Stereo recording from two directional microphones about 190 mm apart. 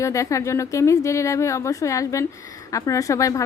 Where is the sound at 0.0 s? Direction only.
15° left (ahead or behind).